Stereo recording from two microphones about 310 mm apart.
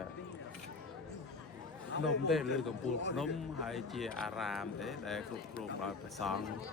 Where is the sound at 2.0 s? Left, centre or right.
Centre.